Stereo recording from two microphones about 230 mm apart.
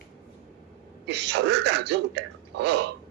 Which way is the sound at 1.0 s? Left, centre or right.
Right.